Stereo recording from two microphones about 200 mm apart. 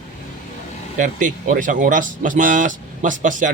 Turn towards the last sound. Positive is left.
turn(degrees=-40)  # may be behind; listen again after turning